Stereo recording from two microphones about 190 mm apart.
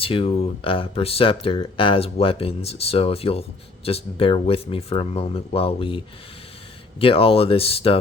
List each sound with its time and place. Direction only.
0.0 s speech: 30° left (ahead or behind)